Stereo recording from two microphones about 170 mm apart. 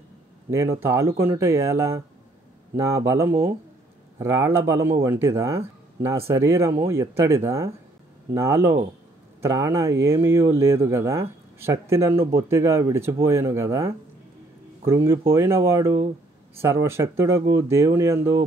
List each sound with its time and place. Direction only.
0.7 s speech: 15° right (ahead or behind)